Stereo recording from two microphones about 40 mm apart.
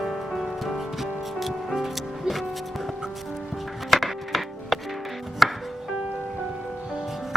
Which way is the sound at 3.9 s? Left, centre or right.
Centre.